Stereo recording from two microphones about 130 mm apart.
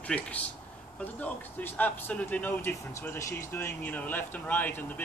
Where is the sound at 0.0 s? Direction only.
10° left (ahead or behind).